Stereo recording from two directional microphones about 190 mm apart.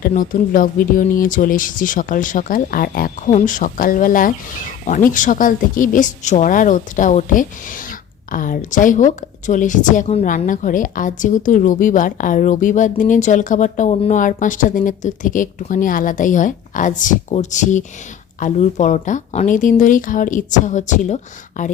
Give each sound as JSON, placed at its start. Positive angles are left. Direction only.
{"t": 0.0, "sound": "a woman's voice", "side_deg": 45}